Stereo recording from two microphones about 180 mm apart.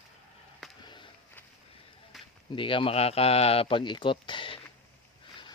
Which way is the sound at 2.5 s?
30° left (ahead or behind).